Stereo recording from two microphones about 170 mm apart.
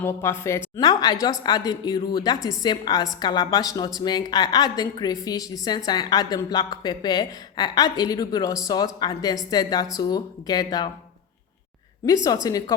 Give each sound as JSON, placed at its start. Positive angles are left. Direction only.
{"t": 0.0, "sound": "a woman's voice", "side_deg": 15}
{"t": 12.0, "sound": "a woman's voice", "side_deg": 20}